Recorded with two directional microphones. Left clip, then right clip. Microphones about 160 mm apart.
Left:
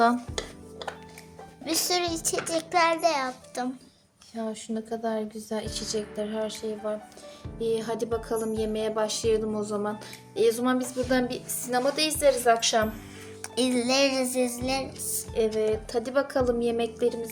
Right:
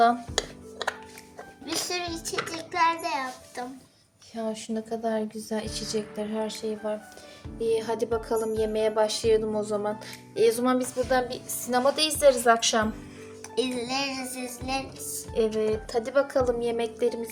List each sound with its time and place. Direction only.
0.3 s music: 60° right (ahead or behind)
1.6 s a child's voice: 90° left
4.4 s a woman's voice: 10° right (ahead or behind)
11.1 s a woman's voice: 15° left (ahead or behind)
13.6 s a child's voice: 90° left
15.3 s a woman's voice: 10° left (ahead or behind)